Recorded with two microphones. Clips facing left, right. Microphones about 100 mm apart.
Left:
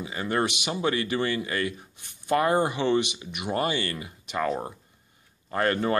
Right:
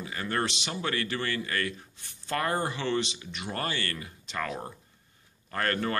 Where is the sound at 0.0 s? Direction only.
15° left (ahead or behind).